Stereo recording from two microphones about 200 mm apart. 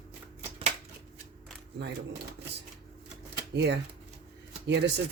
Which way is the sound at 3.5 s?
60° right (ahead or behind).